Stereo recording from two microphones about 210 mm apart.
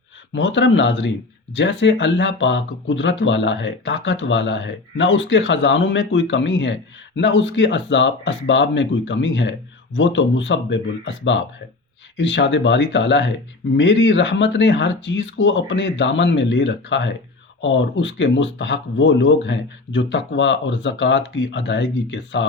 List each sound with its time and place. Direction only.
0.3 s speech: 60° left (ahead or behind)